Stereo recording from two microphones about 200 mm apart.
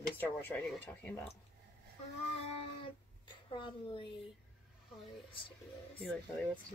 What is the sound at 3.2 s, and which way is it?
Speech, 25° left (ahead or behind).